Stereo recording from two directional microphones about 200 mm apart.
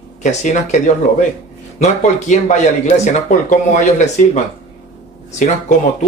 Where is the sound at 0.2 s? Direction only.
35° left (ahead or behind).